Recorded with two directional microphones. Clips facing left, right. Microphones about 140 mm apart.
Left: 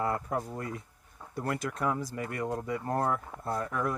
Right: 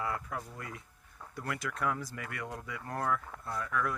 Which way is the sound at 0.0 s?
40° left (ahead or behind).